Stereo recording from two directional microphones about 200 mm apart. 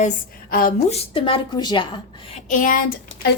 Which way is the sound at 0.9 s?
25° left (ahead or behind).